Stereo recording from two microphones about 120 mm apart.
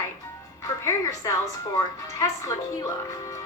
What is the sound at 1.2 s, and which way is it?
A woman's voice, 30° left (ahead or behind).